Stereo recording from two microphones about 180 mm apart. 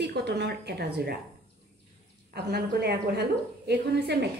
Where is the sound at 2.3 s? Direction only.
65° right (ahead or behind).